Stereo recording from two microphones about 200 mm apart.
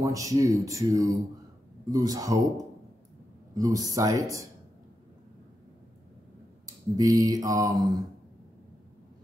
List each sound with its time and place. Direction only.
0.0 s speech: 15° right (ahead or behind)
3.5 s speech: 20° right (ahead or behind)
6.6 s speech: 15° right (ahead or behind)